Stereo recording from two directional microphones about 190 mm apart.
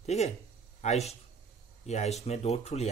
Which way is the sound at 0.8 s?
35° left (ahead or behind).